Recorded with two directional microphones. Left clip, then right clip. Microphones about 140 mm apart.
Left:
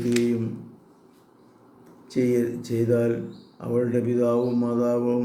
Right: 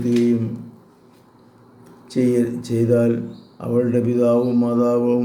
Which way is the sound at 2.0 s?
20° right (ahead or behind).